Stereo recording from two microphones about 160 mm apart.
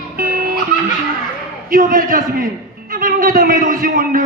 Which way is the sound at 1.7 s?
60° right (ahead or behind).